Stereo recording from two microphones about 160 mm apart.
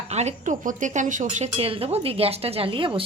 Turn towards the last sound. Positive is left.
turn(degrees=-35)  # may be behind; listen again after turning